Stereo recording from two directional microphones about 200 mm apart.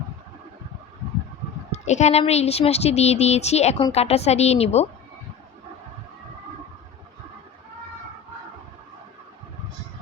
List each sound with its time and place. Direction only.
1.7 s speech: 35° left (ahead or behind)